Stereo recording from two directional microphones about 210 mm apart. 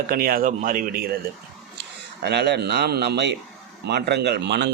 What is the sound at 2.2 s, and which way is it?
A man's voice, 50° right (ahead or behind).